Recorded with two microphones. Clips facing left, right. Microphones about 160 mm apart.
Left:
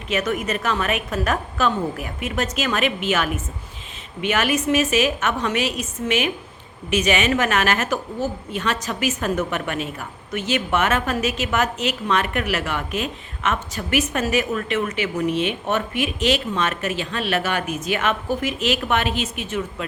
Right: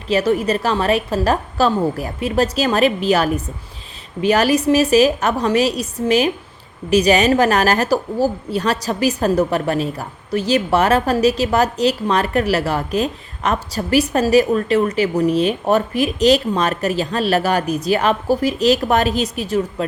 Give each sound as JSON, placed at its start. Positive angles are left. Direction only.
{"t": 0.1, "sound": "a woman's voice", "side_deg": -30}